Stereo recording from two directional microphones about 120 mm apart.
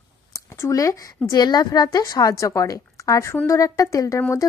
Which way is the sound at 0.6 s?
25° left (ahead or behind).